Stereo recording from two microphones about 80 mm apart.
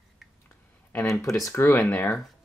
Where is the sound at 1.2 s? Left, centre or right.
Left.